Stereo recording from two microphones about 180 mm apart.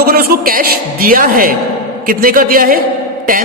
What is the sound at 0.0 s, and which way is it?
A man's voice, 55° right (ahead or behind).